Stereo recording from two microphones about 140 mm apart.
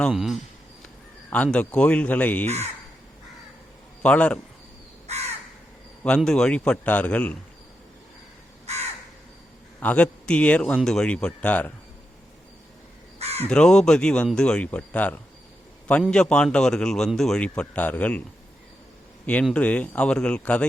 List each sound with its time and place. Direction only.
0.1 s speech: 5° right (ahead or behind)
1.3 s a man's voice: 10° left (ahead or behind)
4.0 s a man's voice: 10° left (ahead or behind)
5.0 s crow: 50° right (ahead or behind)
6.0 s a man's voice: 5° left (ahead or behind)
8.7 s crow: 50° right (ahead or behind)
9.8 s a man's voice: 10° left (ahead or behind)
13.1 s crow: 50° right (ahead or behind)
13.5 s a man's voice: 5° left (ahead or behind)
19.2 s a man's voice: 10° left (ahead or behind)